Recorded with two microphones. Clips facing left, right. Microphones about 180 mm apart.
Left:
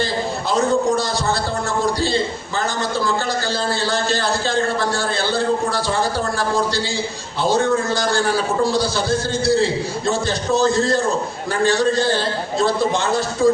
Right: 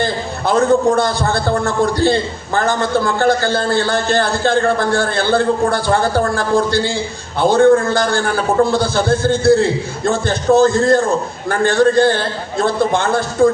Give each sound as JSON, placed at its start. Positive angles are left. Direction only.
{"t": 0.0, "sound": "a man's voice", "side_deg": -55}